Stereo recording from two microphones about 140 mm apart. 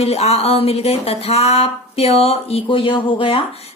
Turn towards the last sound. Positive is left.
turn(degrees=40)  # may be behind; listen again after turning